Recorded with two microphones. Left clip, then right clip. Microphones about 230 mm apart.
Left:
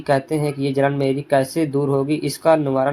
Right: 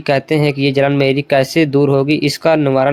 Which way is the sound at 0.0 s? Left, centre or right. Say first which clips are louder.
Right 5 dB; right.